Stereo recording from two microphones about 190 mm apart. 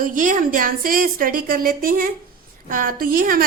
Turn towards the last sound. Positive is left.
turn(degrees=-50)  # may be behind; listen again after turning